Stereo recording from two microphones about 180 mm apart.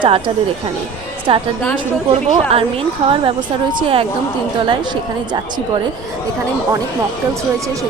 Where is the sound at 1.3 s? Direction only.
30° right (ahead or behind).